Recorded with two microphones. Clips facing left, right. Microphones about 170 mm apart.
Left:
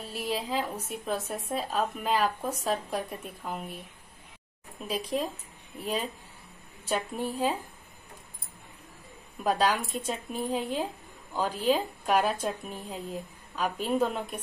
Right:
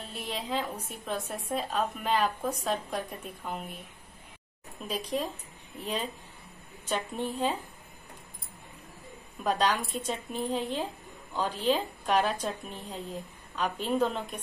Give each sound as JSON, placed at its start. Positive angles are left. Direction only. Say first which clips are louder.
{"t": 0.1, "sound": "a woman's voice", "louder": "left 3 dB", "side_deg": 5}
{"t": 4.8, "sound": "a woman's voice", "louder": "left 1 dB", "side_deg": 5}
{"t": 9.4, "sound": "a woman's voice", "louder": "left 1 dB", "side_deg": 5}